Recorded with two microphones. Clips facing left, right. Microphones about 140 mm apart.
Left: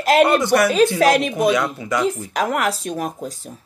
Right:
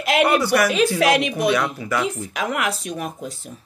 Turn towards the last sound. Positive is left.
turn(degrees=40)  # may be behind; listen again after turning